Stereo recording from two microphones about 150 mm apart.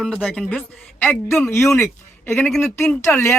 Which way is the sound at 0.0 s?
Centre (ahead or behind).